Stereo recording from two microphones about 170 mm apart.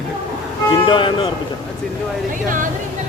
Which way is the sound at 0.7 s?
30° left (ahead or behind).